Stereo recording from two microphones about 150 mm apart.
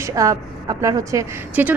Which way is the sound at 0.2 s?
20° right (ahead or behind).